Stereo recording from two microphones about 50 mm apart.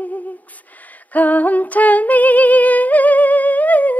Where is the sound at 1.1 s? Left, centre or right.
Left.